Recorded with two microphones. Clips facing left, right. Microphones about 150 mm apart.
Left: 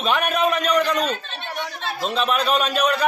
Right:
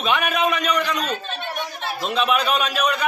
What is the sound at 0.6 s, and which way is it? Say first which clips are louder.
Speech: left 3 dB; 35° left (ahead or behind).